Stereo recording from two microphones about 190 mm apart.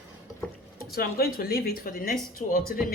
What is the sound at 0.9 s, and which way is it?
Speech, 55° left (ahead or behind).